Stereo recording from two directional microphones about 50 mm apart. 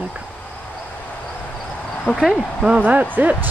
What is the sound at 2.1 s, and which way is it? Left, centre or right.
Speech, left.